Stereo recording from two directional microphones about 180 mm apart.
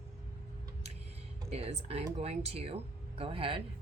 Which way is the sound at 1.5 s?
35° right (ahead or behind).